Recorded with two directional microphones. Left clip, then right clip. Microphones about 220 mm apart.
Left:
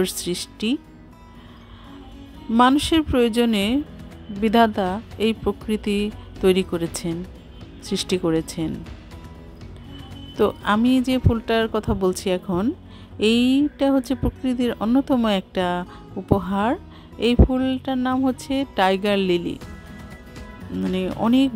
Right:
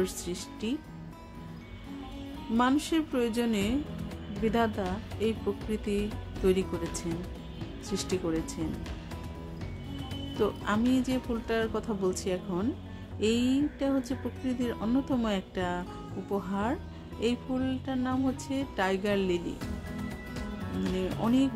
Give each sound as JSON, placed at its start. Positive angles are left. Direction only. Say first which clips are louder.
{"t": 0.0, "sound": "a woman's voice", "louder": "left 9 dB", "side_deg": 45}
{"t": 2.5, "sound": "a woman's voice", "louder": "left 10 dB", "side_deg": 45}
{"t": 10.4, "sound": "speech", "louder": "left 10 dB", "side_deg": 40}
{"t": 20.9, "sound": "a woman's voice", "louder": "left 9 dB", "side_deg": 45}